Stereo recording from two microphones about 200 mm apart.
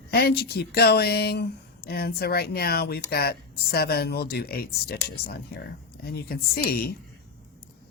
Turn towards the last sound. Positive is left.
turn(degrees=50)  # may be behind; listen again after turning